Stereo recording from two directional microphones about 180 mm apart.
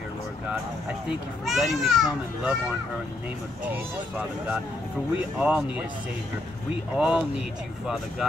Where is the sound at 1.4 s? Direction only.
Centre (ahead or behind).